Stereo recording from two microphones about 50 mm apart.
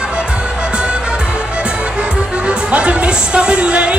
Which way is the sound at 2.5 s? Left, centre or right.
Right.